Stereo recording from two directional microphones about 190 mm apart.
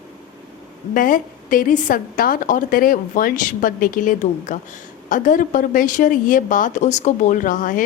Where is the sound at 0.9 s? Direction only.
45° left (ahead or behind).